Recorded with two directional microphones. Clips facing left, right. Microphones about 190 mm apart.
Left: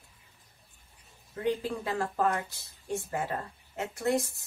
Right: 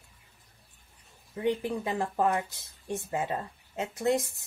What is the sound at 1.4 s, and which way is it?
Speech, 20° right (ahead or behind).